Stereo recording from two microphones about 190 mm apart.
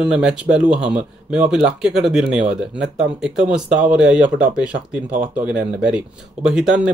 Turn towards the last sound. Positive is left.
turn(degrees=-5)  # may be behind; listen again after turning